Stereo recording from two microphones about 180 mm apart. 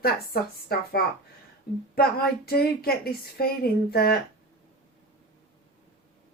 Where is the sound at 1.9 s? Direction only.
60° left (ahead or behind).